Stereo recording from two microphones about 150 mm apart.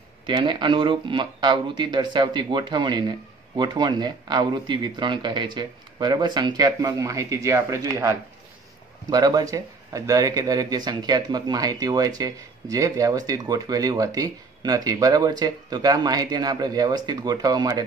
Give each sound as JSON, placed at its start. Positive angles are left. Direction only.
{"t": 0.3, "sound": "speech", "side_deg": -30}